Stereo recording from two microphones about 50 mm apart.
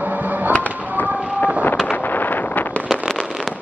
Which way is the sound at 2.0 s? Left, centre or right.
Left.